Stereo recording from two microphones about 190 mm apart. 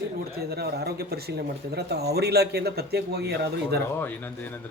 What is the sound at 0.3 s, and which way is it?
Speech, 55° right (ahead or behind).